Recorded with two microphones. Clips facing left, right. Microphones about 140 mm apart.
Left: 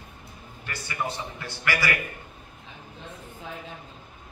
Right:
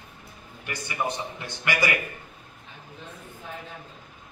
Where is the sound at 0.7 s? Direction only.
20° right (ahead or behind).